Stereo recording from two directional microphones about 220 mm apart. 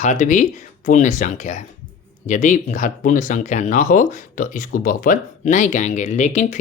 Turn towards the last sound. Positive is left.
turn(degrees=30)  # may be behind; listen again after turning